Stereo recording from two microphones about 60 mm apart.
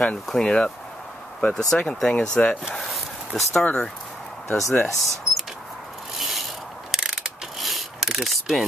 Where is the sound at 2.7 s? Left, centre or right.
Centre.